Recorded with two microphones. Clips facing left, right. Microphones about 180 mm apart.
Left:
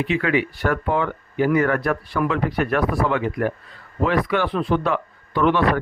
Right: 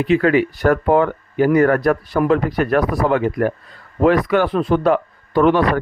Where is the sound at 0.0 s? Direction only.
40° right (ahead or behind).